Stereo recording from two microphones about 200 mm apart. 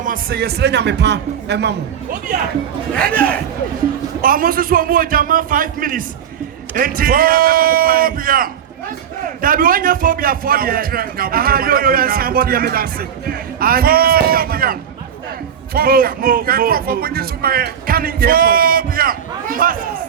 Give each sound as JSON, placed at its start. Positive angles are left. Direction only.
{"t": 0.0, "sound": "a man's voice", "side_deg": -45}
{"t": 2.9, "sound": "speech", "side_deg": 5}
{"t": 4.2, "sound": "speech", "side_deg": -45}